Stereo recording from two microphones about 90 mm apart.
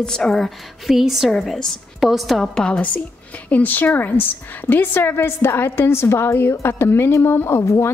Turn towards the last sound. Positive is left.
turn(degrees=30)  # may be behind; listen again after turning